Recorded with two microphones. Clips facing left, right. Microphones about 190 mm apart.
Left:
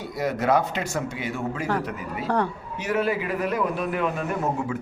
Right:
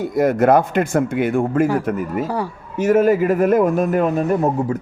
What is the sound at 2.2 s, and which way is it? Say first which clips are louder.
Speech: right 1 dB; 10° right (ahead or behind).